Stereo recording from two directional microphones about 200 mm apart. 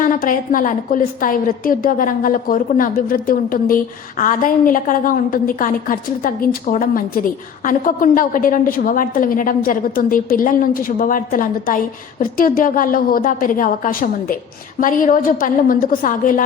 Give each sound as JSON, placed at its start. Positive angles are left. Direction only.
{"t": 0.0, "sound": "a woman's voice", "side_deg": 45}